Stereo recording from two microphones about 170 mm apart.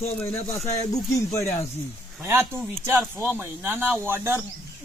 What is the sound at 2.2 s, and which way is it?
Speech, 15° right (ahead or behind).